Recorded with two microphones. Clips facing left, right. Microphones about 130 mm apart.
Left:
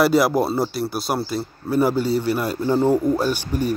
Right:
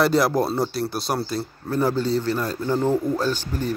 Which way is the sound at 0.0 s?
5° left (ahead or behind).